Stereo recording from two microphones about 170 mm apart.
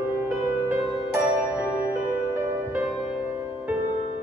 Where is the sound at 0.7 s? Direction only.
15° right (ahead or behind).